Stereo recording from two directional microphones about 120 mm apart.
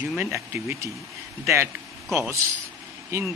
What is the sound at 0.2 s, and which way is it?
Speech, 20° right (ahead or behind).